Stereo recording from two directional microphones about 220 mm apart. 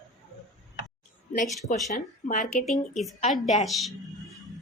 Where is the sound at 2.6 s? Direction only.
Centre (ahead or behind).